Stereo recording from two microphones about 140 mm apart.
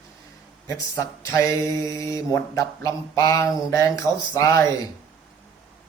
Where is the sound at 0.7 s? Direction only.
20° left (ahead or behind).